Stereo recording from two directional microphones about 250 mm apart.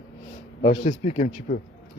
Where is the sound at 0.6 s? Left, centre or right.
Left.